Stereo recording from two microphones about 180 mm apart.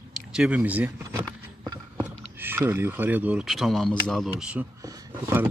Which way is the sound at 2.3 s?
10° right (ahead or behind).